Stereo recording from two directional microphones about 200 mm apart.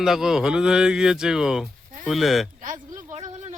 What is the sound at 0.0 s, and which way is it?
Speech, centre (ahead or behind).